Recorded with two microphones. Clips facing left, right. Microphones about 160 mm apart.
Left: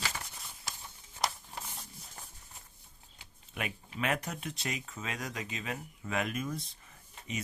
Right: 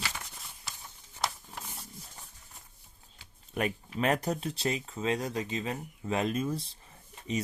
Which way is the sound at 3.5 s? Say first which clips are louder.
Right 6 dB; 40° right (ahead or behind).